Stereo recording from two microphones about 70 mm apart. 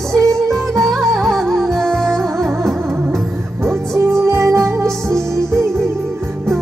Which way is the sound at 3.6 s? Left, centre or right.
Right.